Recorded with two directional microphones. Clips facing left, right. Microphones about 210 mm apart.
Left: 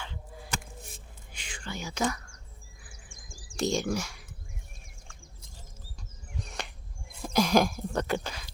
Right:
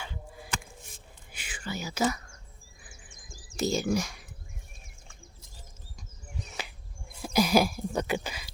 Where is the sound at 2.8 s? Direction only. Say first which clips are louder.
Right 1 dB; 20° right (ahead or behind).